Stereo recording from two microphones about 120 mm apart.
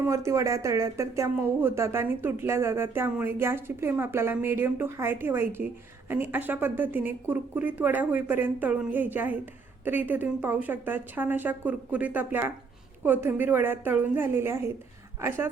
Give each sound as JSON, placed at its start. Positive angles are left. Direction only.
{"t": 0.0, "sound": "speech", "side_deg": -25}